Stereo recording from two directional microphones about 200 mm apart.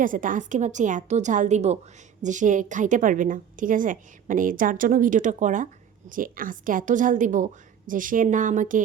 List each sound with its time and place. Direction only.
0.0 s a woman's voice: 40° right (ahead or behind)